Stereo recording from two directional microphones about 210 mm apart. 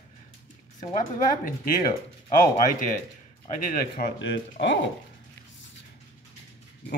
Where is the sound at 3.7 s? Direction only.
50° left (ahead or behind).